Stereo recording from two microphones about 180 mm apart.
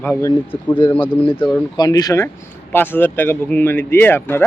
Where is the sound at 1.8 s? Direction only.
20° left (ahead or behind).